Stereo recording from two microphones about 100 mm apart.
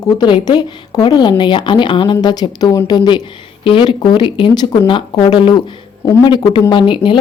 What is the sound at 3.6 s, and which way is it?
Speech, 65° left (ahead or behind).